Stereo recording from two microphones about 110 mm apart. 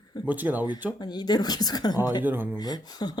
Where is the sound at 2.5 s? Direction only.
40° left (ahead or behind).